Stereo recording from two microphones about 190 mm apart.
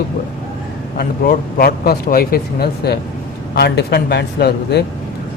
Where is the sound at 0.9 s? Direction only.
50° left (ahead or behind).